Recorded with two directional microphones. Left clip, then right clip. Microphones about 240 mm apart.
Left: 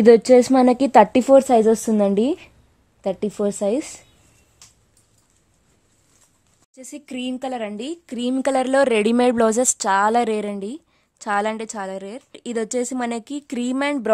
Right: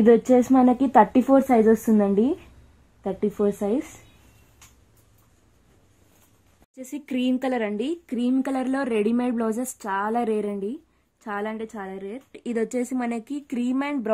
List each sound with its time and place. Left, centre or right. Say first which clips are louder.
0.0 s a woman's voice: left 6 dB; left
6.7 s speech: right 3 dB; left